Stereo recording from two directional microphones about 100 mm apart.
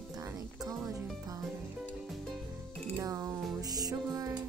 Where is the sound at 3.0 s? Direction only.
30° right (ahead or behind).